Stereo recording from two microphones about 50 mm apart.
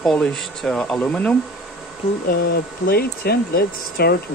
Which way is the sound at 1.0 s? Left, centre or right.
Left.